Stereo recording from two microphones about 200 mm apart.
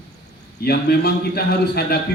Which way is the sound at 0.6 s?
50° left (ahead or behind).